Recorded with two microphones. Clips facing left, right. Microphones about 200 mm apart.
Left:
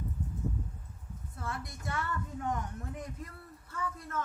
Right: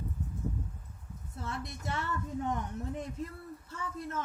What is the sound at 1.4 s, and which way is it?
A woman's voice, 25° right (ahead or behind).